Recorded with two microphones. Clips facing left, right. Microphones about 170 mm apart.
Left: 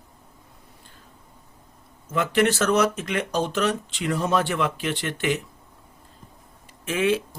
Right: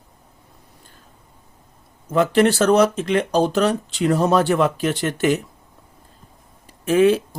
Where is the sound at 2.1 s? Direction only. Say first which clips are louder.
Right 5 dB; 35° right (ahead or behind).